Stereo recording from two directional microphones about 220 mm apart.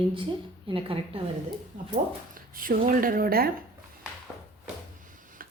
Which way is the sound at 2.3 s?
40° right (ahead or behind).